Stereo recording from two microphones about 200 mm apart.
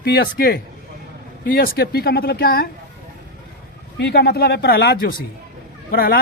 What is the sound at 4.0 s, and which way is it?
Speech, 55° left (ahead or behind).